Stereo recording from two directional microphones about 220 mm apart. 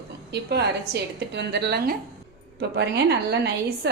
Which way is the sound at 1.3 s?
50° right (ahead or behind).